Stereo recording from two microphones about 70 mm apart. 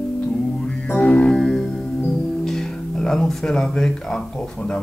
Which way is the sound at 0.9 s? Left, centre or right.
Left.